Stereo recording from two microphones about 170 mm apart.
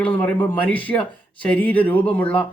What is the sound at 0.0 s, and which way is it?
Speech, 10° left (ahead or behind).